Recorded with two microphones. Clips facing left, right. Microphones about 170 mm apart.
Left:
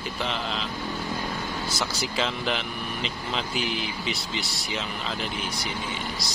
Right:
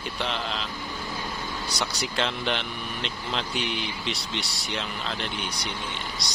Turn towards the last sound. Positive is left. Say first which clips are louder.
# left 3 dB
turn(degrees=0)  # may be behind; listen again after turning